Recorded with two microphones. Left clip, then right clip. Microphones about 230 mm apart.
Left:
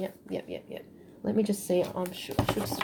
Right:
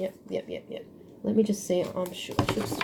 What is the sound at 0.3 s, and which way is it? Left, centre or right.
Speech, left.